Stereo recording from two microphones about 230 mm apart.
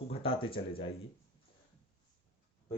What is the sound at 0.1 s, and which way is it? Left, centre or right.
Speech, left.